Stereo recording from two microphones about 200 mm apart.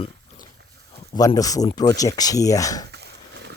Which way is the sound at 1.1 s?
20° left (ahead or behind).